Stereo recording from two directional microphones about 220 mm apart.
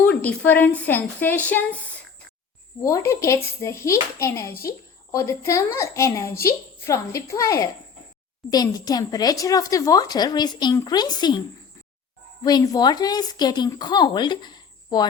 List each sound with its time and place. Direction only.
0.0 s a woman's voice: 5° left (ahead or behind)